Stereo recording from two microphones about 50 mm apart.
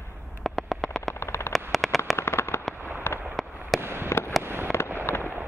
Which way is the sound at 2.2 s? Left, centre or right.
Left.